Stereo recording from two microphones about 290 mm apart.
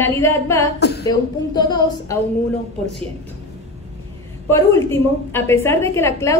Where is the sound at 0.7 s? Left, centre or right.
Left.